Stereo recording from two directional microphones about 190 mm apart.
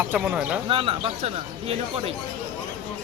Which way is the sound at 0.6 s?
30° right (ahead or behind).